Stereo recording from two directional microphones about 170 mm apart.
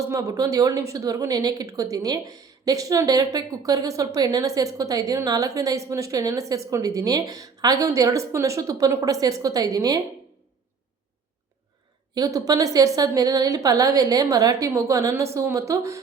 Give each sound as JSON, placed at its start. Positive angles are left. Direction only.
{"t": 0.1, "sound": "a woman's voice", "side_deg": -20}
{"t": 12.1, "sound": "a woman's voice", "side_deg": -20}